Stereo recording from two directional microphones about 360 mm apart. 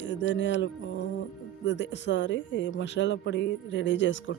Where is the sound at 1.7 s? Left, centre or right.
Left.